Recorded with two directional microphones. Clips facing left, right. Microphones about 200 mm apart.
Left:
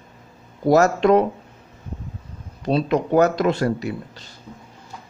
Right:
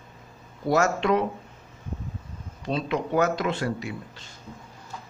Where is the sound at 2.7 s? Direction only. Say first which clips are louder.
Left 7 dB; 35° left (ahead or behind).